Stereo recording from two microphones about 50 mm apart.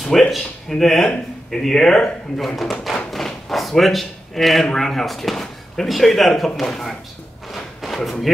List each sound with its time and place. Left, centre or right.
0.3 s speech: centre
1.0 s speech: centre
3.1 s a sound: centre
4.7 s speech: centre
7.5 s thump: centre